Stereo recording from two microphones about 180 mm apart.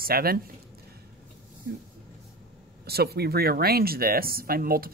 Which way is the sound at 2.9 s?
60° right (ahead or behind).